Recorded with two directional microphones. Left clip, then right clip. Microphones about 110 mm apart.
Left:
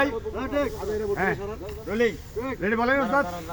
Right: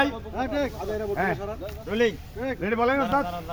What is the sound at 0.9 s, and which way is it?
Speech, 5° right (ahead or behind).